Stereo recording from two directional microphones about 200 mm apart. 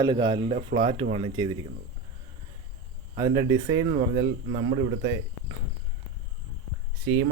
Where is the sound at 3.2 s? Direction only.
20° right (ahead or behind).